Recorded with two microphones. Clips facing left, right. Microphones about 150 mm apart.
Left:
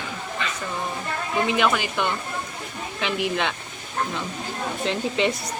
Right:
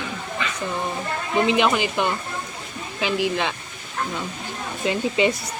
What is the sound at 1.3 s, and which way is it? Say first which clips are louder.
Speech: right 3 dB; 20° right (ahead or behind).